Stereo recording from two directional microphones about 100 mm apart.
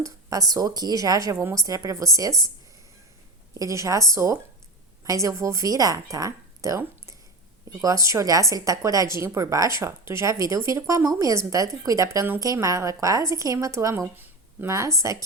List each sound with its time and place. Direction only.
0.0 s a woman's voice: 35° right (ahead or behind)
3.6 s a woman's voice: 35° right (ahead or behind)